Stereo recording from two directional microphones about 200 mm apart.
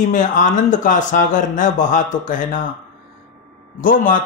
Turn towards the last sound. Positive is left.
turn(degrees=40)  # may be behind; listen again after turning